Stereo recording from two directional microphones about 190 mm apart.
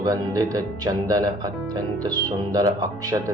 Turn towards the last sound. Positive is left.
turn(degrees=-20)  # may be behind; listen again after turning